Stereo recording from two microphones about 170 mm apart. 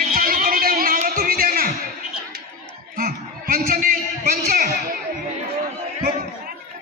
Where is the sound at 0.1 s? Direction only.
55° right (ahead or behind).